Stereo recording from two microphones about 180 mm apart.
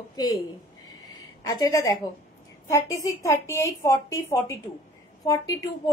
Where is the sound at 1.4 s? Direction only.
20° left (ahead or behind).